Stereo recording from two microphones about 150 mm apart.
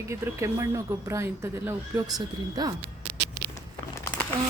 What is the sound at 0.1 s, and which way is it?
Speech, 20° right (ahead or behind).